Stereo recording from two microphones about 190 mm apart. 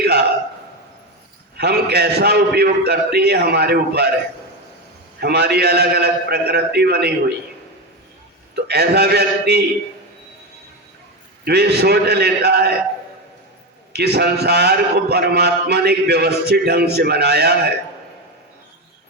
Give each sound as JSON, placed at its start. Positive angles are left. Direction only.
{"t": 0.0, "sound": "a sound", "side_deg": -60}
{"t": 1.5, "sound": "a man's voice", "side_deg": -60}
{"t": 5.2, "sound": "a man's voice", "side_deg": -60}
{"t": 8.6, "sound": "a man's voice", "side_deg": -60}
{"t": 11.4, "sound": "a man's voice", "side_deg": -60}
{"t": 13.9, "sound": "a man's voice", "side_deg": -60}